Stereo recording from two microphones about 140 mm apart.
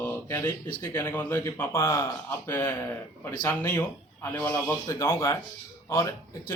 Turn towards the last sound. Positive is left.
turn(degrees=20)  # may be behind; listen again after turning